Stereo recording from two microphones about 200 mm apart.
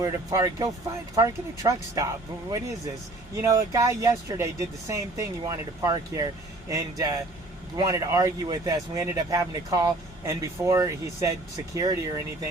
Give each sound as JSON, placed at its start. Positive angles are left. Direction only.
{"t": 0.0, "sound": "speech", "side_deg": -15}